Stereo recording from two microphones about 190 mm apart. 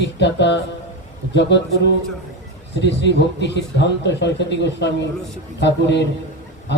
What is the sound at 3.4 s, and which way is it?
A man's voice, 65° left (ahead or behind).